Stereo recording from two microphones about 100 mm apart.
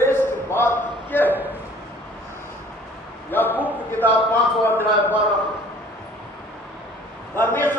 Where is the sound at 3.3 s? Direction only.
20° left (ahead or behind).